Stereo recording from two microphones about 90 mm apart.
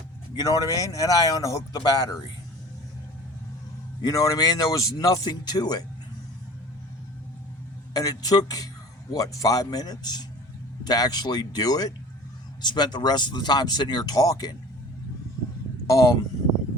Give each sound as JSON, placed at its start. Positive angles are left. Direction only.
{"t": 0.3, "sound": "speech", "side_deg": 45}
{"t": 4.0, "sound": "speech", "side_deg": 35}
{"t": 5.2, "sound": "speech", "side_deg": 50}
{"t": 7.9, "sound": "speech", "side_deg": 45}
{"t": 12.6, "sound": "speech", "side_deg": 55}
{"t": 15.9, "sound": "speech", "side_deg": 40}